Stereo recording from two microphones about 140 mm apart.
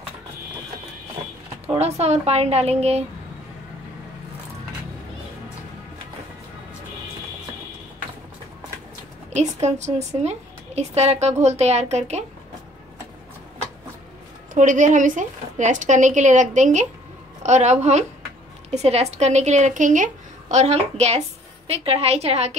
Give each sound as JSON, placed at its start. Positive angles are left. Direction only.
{"t": 1.7, "sound": "a woman's voice", "side_deg": -50}
{"t": 9.3, "sound": "a woman's voice", "side_deg": -55}
{"t": 14.5, "sound": "a woman's voice", "side_deg": -65}